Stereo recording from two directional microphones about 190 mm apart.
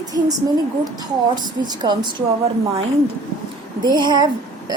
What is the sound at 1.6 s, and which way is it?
Speech, 20° right (ahead or behind).